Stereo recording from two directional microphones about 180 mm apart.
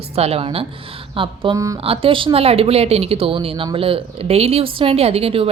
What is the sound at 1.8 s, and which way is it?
Speech, 30° right (ahead or behind).